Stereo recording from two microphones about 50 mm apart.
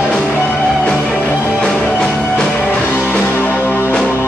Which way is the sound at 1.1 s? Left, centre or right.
Left.